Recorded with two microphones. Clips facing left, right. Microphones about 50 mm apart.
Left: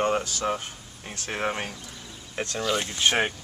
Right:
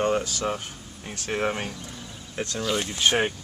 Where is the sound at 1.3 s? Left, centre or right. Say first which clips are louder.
Right 2 dB; centre.